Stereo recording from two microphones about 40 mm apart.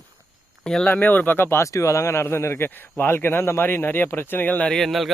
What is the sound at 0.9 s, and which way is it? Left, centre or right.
Speech, left.